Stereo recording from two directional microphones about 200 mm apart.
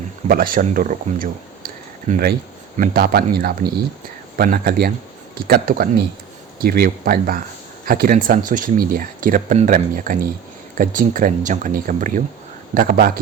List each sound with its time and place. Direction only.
0.3 s speech: 45° right (ahead or behind)